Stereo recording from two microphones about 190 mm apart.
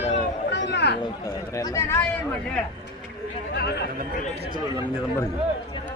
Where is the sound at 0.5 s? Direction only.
65° left (ahead or behind).